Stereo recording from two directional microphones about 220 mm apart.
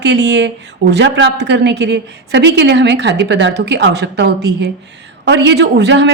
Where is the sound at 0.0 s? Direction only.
50° right (ahead or behind).